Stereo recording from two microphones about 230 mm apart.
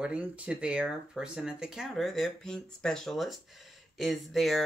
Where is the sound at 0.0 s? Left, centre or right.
Centre.